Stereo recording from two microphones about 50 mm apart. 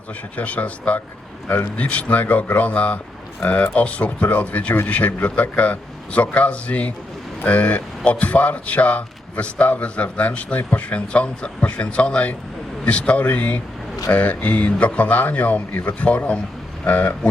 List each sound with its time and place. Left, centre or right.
0.3 s a man's voice: left